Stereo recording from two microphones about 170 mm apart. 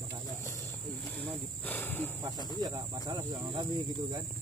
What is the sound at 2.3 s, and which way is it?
Speech, 25° left (ahead or behind).